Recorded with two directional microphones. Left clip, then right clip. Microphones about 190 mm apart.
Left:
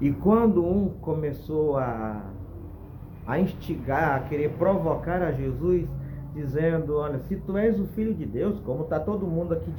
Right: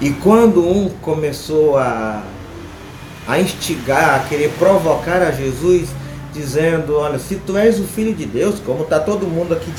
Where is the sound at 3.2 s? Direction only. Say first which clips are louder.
Right 11 dB; 20° right (ahead or behind).